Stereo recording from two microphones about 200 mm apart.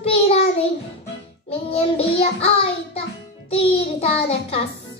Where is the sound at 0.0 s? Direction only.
30° left (ahead or behind).